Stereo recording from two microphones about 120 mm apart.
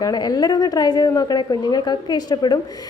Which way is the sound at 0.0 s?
35° left (ahead or behind).